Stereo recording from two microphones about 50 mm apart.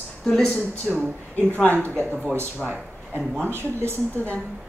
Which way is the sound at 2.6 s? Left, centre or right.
Right.